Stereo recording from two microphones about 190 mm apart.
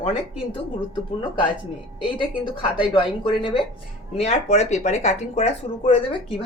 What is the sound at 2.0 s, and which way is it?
A woman's voice, 25° left (ahead or behind).